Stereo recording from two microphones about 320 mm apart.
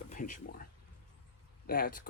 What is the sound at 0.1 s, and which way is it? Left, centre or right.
Speech, left.